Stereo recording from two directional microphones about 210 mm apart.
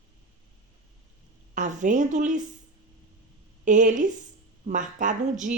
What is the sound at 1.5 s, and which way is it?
Speech, 35° right (ahead or behind).